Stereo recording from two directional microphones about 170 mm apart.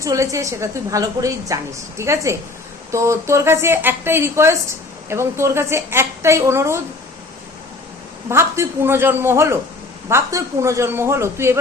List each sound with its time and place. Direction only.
0.0 s a woman's voice: 20° right (ahead or behind)
8.3 s a woman's voice: 15° right (ahead or behind)